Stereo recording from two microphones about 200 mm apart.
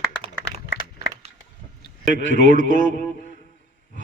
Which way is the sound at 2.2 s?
40° right (ahead or behind).